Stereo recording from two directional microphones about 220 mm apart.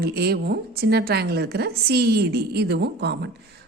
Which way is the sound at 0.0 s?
45° right (ahead or behind).